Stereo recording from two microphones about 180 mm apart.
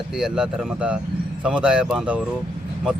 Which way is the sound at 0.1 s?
5° right (ahead or behind).